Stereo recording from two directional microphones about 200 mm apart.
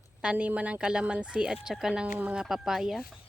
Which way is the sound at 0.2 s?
5° right (ahead or behind).